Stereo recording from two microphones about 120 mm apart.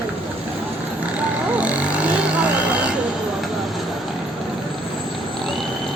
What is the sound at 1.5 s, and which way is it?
Vehicle, 10° right (ahead or behind).